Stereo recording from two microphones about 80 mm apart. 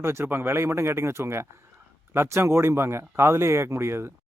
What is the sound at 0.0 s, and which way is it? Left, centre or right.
Speech, right.